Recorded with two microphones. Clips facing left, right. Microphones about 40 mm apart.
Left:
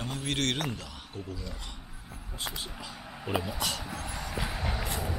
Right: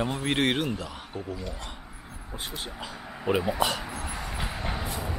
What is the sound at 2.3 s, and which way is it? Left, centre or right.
Speech, right.